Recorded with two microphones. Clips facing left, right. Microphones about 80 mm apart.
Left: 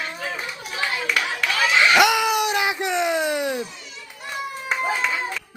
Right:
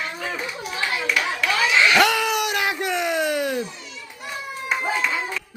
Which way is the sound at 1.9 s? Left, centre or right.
Centre.